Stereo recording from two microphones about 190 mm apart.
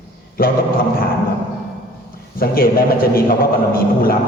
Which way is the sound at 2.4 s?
50° left (ahead or behind).